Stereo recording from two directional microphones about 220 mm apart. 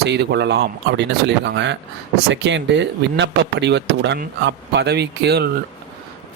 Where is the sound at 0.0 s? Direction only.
50° right (ahead or behind).